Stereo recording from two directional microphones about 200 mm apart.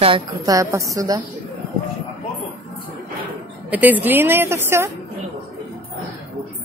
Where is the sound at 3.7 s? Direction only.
10° right (ahead or behind).